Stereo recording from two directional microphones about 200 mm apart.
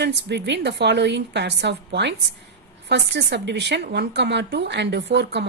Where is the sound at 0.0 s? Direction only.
60° right (ahead or behind).